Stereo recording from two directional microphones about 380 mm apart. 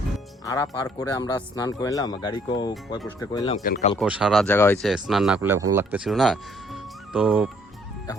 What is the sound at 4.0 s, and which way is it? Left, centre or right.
Speech, centre.